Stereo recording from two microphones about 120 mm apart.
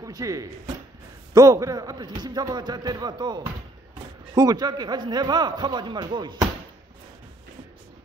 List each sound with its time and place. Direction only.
0.0 s a man's voice: 30° right (ahead or behind)